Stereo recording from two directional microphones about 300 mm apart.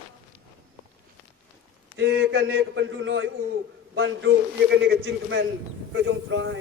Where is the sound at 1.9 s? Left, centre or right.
Right.